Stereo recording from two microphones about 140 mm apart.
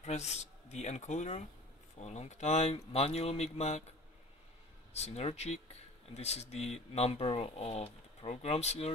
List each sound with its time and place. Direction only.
0.0 s speech: 55° left (ahead or behind)
4.9 s speech: 50° left (ahead or behind)